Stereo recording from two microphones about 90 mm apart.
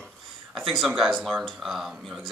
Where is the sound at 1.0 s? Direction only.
5° right (ahead or behind).